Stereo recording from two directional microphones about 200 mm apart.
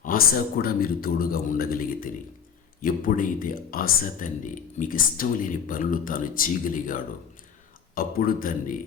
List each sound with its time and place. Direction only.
0.0 s speech: 45° left (ahead or behind)